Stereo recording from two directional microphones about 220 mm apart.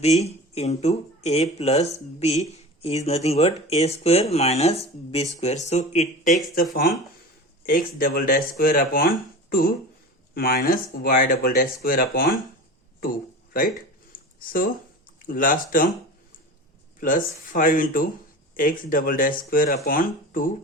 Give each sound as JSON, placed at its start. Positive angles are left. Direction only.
{"t": 0.0, "sound": "speech", "side_deg": 30}
{"t": 7.6, "sound": "speech", "side_deg": 40}
{"t": 14.4, "sound": "speech", "side_deg": 40}
{"t": 17.0, "sound": "speech", "side_deg": 40}